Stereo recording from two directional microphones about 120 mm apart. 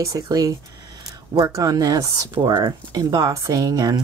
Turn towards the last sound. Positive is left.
turn(degrees=-35)  # may be behind; listen again after turning